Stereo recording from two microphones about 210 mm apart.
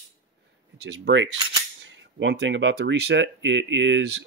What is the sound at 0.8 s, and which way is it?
Speech, 60° right (ahead or behind).